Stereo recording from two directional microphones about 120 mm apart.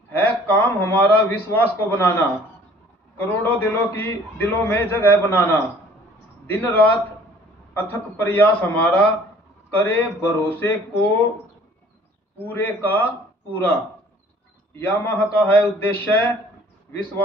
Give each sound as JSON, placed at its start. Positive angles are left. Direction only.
{"t": 0.1, "sound": "a man's voice", "side_deg": 15}
{"t": 12.4, "sound": "a man's voice", "side_deg": 15}